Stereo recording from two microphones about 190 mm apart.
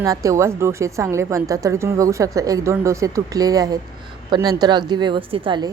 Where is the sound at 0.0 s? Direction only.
15° right (ahead or behind).